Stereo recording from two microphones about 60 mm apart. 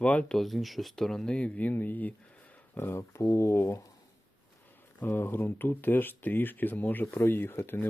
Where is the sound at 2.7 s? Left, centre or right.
Left.